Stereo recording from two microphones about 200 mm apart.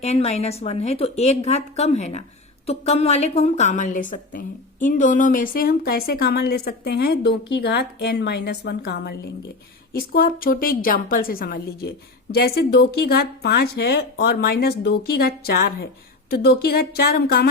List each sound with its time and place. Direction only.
0.0 s a woman's voice: 30° left (ahead or behind); by 17.5 s 50° left (ahead or behind)